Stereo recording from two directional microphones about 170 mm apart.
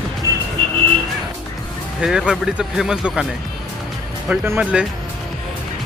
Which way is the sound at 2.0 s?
5° right (ahead or behind).